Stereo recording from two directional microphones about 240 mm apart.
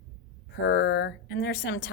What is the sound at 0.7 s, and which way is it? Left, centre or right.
A woman's voice, left.